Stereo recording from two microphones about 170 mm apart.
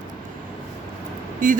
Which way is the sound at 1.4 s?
50° right (ahead or behind).